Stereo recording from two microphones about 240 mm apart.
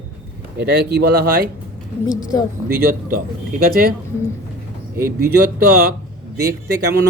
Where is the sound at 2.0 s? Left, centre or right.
Centre.